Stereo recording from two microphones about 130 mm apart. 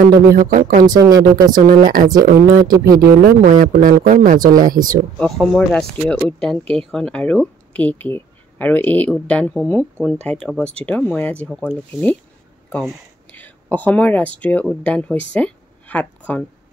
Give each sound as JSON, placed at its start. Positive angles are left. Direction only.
{"t": 0.0, "sound": "speech", "side_deg": -90}
{"t": 1.0, "sound": "speech", "side_deg": -30}
{"t": 2.5, "sound": "speech", "side_deg": -90}
{"t": 5.2, "sound": "speech", "side_deg": 5}
{"t": 13.3, "sound": "speech", "side_deg": 15}